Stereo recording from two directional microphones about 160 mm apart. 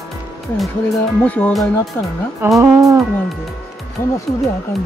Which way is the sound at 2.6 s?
20° right (ahead or behind).